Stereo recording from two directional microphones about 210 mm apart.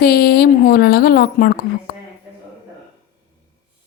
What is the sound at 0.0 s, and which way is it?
A woman's voice, 50° left (ahead or behind).